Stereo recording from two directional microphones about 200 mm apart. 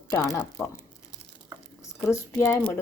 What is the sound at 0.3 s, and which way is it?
Speech, 15° left (ahead or behind).